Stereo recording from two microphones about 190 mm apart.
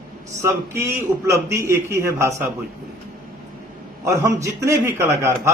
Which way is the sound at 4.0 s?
15° right (ahead or behind).